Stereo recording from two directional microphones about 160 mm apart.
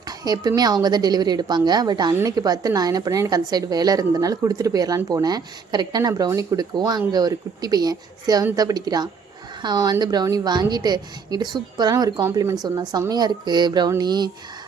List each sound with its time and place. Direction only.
0.3 s a woman's voice: 25° right (ahead or behind)